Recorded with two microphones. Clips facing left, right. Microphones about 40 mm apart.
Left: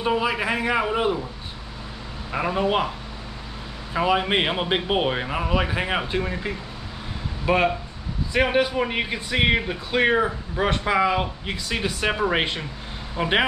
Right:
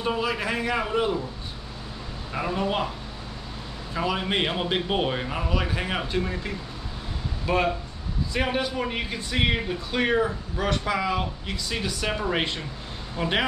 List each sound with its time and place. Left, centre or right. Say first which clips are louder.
0.0 s a man's voice: left 3 dB; centre
2.3 s speech: left 4 dB; left
3.9 s speech: left 5 dB; left